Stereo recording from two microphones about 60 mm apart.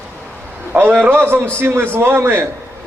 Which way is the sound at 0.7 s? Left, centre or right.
Right.